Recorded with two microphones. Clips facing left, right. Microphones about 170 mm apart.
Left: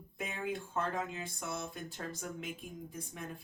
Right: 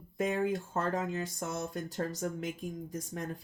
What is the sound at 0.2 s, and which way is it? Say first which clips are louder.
Speech: right 8 dB; 45° right (ahead or behind).